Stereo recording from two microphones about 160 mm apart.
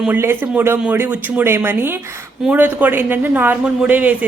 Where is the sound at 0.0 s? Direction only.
10° right (ahead or behind).